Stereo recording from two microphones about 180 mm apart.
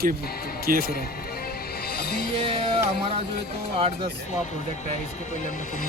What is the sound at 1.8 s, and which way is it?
Music, 60° left (ahead or behind).